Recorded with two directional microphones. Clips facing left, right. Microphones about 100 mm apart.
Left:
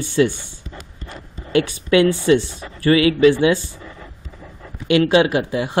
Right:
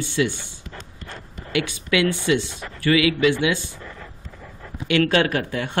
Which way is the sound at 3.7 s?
15° left (ahead or behind).